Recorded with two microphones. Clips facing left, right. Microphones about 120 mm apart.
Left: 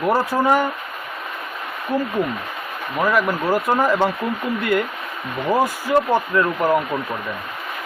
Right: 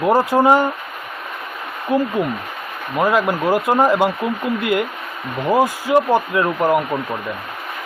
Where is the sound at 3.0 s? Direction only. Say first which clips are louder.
Right 2 dB; 20° right (ahead or behind).